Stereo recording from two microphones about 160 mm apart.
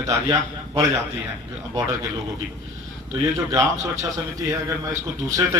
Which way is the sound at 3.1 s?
20° right (ahead or behind).